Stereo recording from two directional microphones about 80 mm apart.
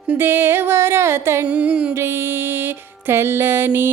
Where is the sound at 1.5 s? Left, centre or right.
Centre.